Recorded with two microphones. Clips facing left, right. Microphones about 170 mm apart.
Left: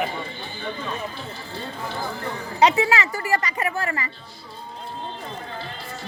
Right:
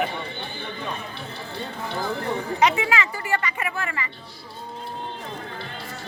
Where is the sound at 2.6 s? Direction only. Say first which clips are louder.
Left 4 dB; 35° left (ahead or behind).